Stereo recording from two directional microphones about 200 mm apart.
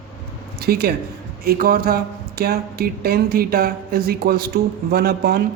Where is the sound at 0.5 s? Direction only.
50° right (ahead or behind).